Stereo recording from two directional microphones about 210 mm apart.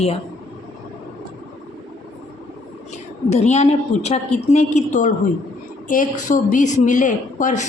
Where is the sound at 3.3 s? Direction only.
30° left (ahead or behind).